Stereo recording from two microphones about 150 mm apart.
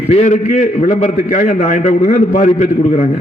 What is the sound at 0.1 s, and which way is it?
A man's voice, 50° left (ahead or behind).